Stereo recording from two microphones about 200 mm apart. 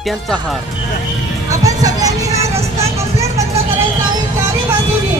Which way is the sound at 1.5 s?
15° right (ahead or behind).